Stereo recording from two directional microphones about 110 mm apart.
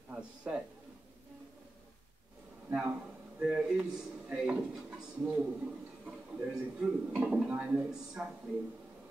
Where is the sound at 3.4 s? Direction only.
10° right (ahead or behind).